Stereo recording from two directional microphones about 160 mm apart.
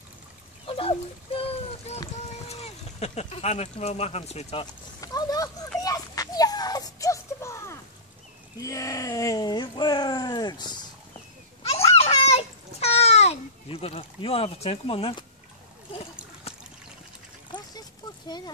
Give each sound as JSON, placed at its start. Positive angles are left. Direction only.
{"t": 0.7, "sound": "dog", "side_deg": 35}
{"t": 2.4, "sound": "speech", "side_deg": 40}
{"t": 5.0, "sound": "a sound", "side_deg": 25}
{"t": 8.5, "sound": "speech", "side_deg": 20}
{"t": 11.6, "sound": "a sound", "side_deg": 40}
{"t": 17.5, "sound": "duck", "side_deg": 25}